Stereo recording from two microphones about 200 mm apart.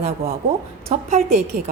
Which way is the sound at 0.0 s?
30° right (ahead or behind).